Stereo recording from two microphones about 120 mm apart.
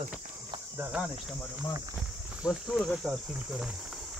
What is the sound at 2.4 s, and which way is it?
Cricket, 5° right (ahead or behind).